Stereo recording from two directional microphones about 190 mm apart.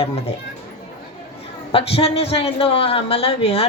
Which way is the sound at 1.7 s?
30° left (ahead or behind).